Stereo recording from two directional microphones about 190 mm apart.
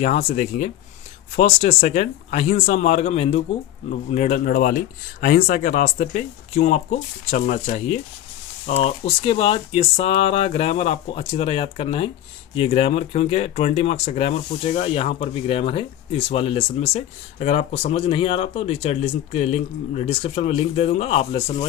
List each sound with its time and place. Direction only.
0.0 s speech: 40° left (ahead or behind)